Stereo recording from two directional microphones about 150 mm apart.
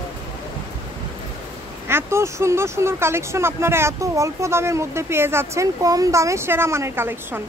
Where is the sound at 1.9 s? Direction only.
15° right (ahead or behind).